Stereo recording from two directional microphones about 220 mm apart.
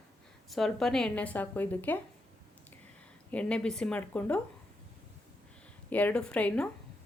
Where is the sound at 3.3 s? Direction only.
5° left (ahead or behind).